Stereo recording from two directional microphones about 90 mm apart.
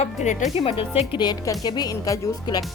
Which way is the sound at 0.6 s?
90° left.